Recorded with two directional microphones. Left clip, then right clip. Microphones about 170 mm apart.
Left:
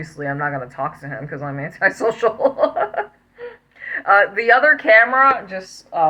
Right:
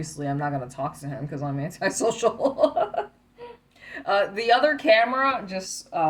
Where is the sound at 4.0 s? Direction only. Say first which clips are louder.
Left 9 dB; 40° right (ahead or behind).